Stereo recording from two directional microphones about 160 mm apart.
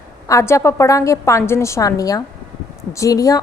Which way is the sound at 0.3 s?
20° left (ahead or behind).